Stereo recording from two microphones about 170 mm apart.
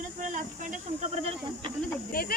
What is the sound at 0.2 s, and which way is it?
Speech, 50° right (ahead or behind).